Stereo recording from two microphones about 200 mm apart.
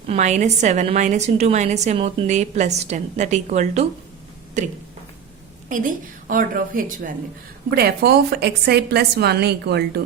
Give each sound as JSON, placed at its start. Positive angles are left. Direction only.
{"t": 0.1, "sound": "a woman's voice", "side_deg": -35}
{"t": 5.6, "sound": "a woman's voice", "side_deg": -40}